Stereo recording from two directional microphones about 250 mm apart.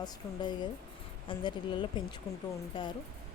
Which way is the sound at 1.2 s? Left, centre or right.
Centre.